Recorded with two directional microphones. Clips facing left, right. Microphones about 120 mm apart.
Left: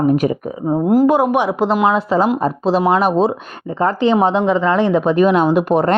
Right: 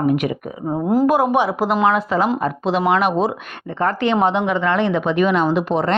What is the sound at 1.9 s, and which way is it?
A woman's voice, 30° left (ahead or behind).